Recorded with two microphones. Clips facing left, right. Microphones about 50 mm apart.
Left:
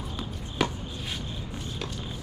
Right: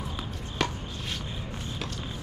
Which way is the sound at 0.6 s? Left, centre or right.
Centre.